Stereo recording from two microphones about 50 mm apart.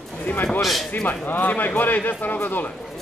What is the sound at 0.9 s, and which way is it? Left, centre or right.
Speech, left.